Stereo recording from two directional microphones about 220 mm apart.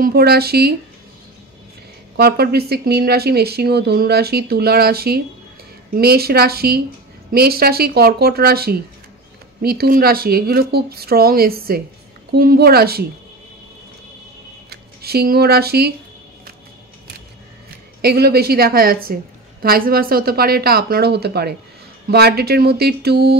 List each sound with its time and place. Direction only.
0.0 s speech: 45° right (ahead or behind)
2.1 s speech: 45° right (ahead or behind)
14.7 s speech: 45° right (ahead or behind)
18.0 s speech: 45° right (ahead or behind)